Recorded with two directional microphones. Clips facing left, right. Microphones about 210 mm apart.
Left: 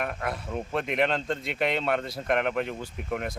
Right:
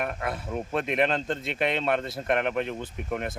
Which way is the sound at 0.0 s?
5° right (ahead or behind).